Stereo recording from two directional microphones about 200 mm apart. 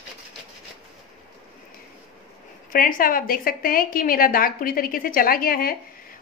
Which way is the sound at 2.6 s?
45° left (ahead or behind).